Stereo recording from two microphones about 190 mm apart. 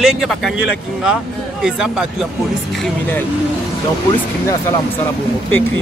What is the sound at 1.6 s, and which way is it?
Speech, 5° right (ahead or behind).